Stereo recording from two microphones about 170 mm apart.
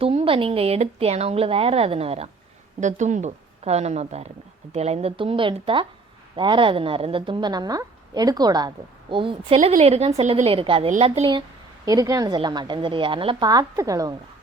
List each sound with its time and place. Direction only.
0.0 s a woman's voice: 35° right (ahead or behind)
9.6 s speech: 40° right (ahead or behind)
11.9 s a woman's voice: 20° right (ahead or behind)